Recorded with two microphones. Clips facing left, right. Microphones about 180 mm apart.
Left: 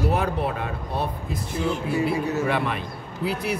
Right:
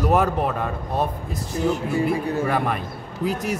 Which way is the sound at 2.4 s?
45° right (ahead or behind).